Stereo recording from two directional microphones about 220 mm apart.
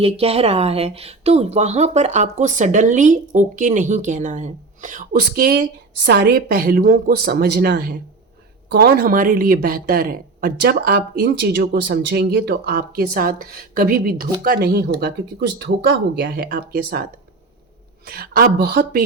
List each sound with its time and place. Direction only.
0.0 s speech: 25° right (ahead or behind); by 17.1 s 45° right (ahead or behind)
18.1 s speech: 40° right (ahead or behind)